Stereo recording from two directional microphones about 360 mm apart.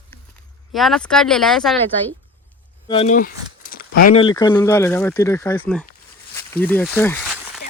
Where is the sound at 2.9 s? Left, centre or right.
Centre.